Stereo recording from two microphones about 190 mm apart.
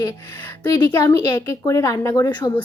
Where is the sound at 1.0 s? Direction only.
15° left (ahead or behind).